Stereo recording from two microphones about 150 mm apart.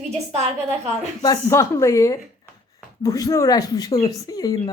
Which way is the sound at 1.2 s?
25° left (ahead or behind).